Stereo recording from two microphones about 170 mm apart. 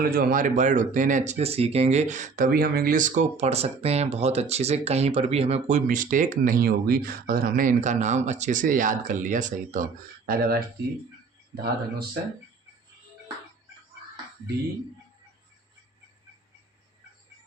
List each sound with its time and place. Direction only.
0.0 s speech: 60° right (ahead or behind)
10.2 s speech: 60° right (ahead or behind)